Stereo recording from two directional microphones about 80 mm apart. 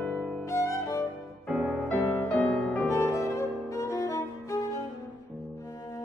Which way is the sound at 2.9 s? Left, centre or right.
Left.